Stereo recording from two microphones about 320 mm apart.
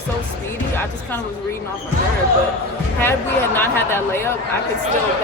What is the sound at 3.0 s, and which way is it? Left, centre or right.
A woman's voice, centre.